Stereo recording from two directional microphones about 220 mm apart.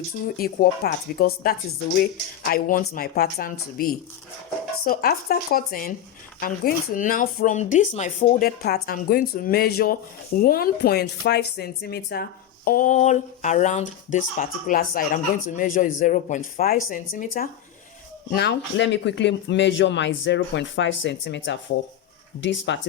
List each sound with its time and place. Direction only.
0.3 s speech: 40° left (ahead or behind)